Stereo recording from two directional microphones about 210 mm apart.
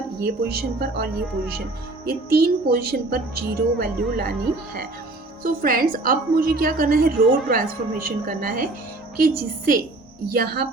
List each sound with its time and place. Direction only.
0.2 s a woman's voice: 45° right (ahead or behind)